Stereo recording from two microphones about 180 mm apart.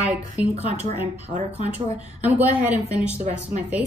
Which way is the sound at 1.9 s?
35° right (ahead or behind).